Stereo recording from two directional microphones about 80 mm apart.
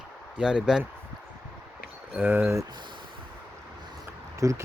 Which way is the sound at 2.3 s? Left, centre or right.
Right.